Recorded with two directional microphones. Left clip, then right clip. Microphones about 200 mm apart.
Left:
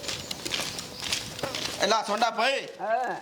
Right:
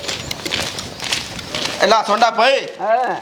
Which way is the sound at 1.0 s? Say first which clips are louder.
Right 9 dB; 15° right (ahead or behind).